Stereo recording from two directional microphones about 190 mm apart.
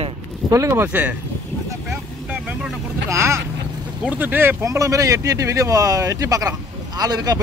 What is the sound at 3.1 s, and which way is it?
Speech, 15° right (ahead or behind).